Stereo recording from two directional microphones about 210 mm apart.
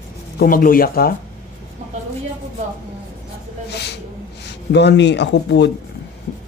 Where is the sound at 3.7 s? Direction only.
50° left (ahead or behind).